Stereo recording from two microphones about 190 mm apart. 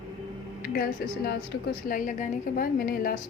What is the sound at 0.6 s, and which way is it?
A woman's voice, 50° left (ahead or behind).